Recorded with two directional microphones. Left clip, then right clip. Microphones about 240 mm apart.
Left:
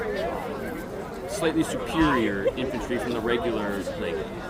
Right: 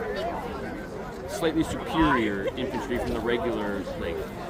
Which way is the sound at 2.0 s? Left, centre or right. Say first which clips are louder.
Even; right.